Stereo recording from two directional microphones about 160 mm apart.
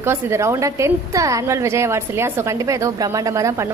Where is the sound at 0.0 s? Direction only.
15° right (ahead or behind).